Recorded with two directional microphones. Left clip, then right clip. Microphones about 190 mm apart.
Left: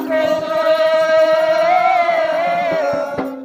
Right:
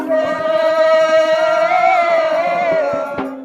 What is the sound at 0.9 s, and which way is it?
Music, 50° right (ahead or behind).